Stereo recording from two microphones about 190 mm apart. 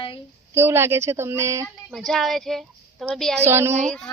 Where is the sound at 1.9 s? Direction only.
Centre (ahead or behind).